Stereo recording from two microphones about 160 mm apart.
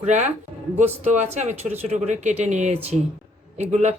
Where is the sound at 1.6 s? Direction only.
45° right (ahead or behind).